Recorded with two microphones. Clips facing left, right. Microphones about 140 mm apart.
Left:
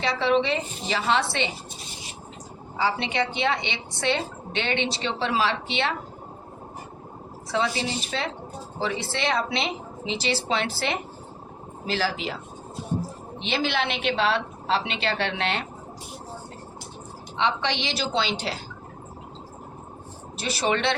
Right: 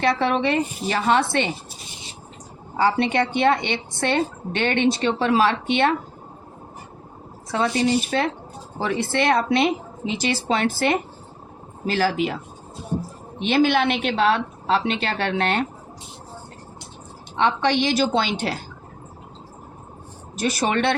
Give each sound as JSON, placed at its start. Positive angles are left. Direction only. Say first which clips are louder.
{"t": 0.0, "sound": "a woman's voice", "louder": "right 2 dB", "side_deg": -55}
{"t": 2.7, "sound": "a woman's voice", "louder": "right 6 dB", "side_deg": -50}
{"t": 7.5, "sound": "a woman's voice", "louder": "right 6 dB", "side_deg": -50}
{"t": 13.4, "sound": "a woman's voice", "louder": "right 8 dB", "side_deg": -50}
{"t": 17.3, "sound": "a woman's voice", "louder": "right 6 dB", "side_deg": -50}
{"t": 20.3, "sound": "a woman's voice", "louder": "right 3 dB", "side_deg": -45}